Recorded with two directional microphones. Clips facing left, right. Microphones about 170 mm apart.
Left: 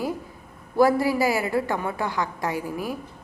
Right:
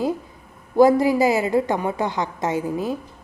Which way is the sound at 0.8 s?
20° right (ahead or behind).